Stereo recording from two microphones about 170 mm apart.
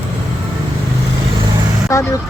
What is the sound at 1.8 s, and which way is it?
Speech, 20° left (ahead or behind).